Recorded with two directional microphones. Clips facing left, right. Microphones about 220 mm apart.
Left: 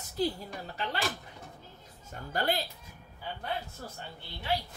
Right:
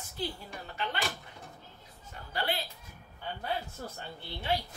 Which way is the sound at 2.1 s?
45° left (ahead or behind).